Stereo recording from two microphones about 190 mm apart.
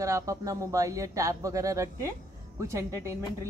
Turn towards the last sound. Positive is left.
turn(degrees=-15)  # may be behind; listen again after turning